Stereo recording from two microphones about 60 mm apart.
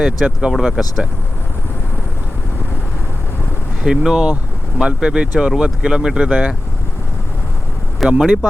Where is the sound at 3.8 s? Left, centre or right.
Centre.